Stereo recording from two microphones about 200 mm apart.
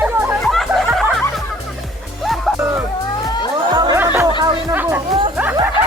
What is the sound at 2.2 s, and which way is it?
Music, centre (ahead or behind).